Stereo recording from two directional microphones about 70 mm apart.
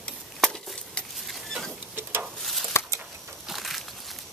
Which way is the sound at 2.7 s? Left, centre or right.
Left.